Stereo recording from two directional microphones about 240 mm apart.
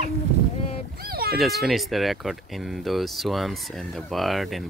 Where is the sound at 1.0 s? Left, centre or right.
Right.